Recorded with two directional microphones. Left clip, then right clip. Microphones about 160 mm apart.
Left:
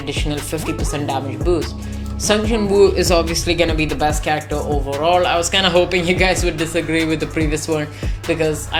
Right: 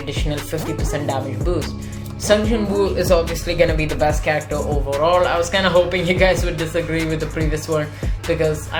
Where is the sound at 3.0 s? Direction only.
45° left (ahead or behind).